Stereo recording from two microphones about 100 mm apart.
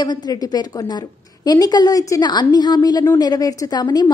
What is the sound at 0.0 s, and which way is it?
A woman's voice, 45° left (ahead or behind).